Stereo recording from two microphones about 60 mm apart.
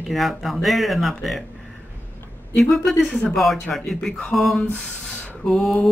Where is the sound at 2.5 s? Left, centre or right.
Centre.